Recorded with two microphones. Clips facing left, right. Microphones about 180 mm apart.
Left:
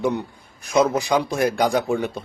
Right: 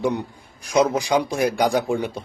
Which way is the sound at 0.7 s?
15° right (ahead or behind).